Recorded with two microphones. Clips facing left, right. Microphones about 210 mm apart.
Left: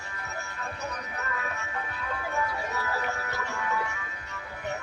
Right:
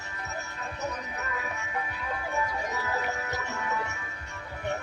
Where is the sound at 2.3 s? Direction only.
20° right (ahead or behind).